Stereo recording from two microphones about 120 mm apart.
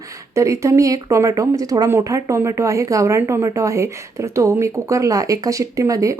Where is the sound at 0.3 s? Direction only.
25° right (ahead or behind).